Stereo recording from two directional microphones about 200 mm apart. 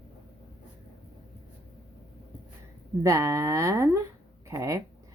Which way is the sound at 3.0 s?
15° right (ahead or behind).